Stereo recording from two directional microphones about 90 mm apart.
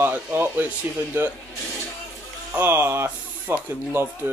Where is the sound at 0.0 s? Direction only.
20° right (ahead or behind).